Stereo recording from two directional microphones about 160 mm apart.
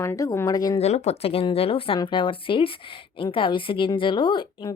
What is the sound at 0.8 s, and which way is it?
A woman's voice, 40° left (ahead or behind).